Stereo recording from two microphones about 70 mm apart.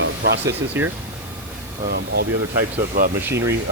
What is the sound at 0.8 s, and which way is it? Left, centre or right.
Speech, right.